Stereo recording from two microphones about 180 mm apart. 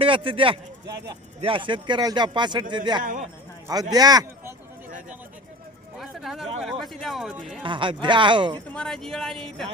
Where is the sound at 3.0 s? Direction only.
45° right (ahead or behind).